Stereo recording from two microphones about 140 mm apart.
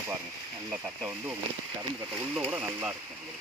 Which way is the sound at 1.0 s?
15° right (ahead or behind).